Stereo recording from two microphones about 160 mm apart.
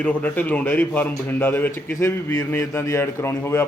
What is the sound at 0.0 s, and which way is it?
A man's voice, 10° left (ahead or behind).